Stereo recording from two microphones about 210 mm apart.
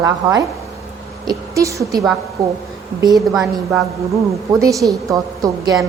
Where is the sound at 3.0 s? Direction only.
20° right (ahead or behind).